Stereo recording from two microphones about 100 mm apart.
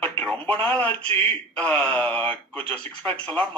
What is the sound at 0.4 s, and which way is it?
Speech, 15° left (ahead or behind).